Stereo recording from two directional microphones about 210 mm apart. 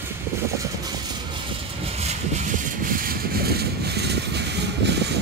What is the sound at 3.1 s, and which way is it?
Vehicle, 45° right (ahead or behind).